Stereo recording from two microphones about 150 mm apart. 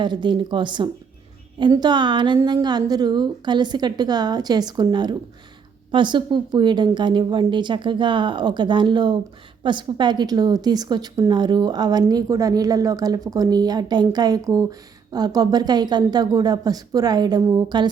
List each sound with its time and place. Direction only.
0.0 s a woman's voice: 30° right (ahead or behind)